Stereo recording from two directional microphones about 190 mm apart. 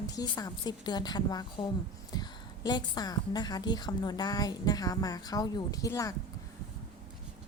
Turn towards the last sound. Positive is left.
turn(degrees=15)  # may be behind; listen again after turning